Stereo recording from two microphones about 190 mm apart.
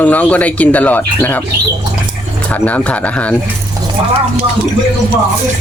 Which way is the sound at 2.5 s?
10° left (ahead or behind).